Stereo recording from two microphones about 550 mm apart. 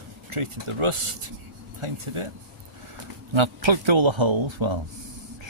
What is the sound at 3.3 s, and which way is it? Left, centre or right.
Speech, right.